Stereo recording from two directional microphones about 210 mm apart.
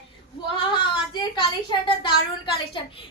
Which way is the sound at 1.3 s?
20° left (ahead or behind).